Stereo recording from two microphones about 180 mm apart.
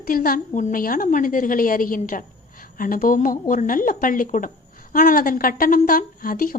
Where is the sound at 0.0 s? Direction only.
50° left (ahead or behind).